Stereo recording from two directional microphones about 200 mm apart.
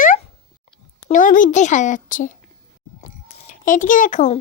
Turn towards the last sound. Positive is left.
turn(degrees=40)  # may be behind; listen again after turning